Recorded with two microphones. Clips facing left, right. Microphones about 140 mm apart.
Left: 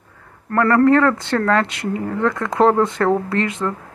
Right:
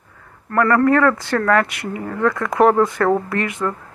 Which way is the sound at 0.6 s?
25° left (ahead or behind).